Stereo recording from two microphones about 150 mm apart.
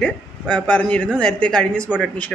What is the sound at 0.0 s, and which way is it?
Speech, 5° left (ahead or behind).